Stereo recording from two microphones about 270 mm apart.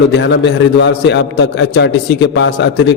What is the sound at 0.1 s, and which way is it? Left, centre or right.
A man's voice, left.